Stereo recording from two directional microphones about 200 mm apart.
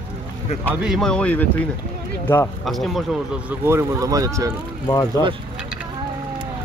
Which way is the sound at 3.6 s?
15° right (ahead or behind).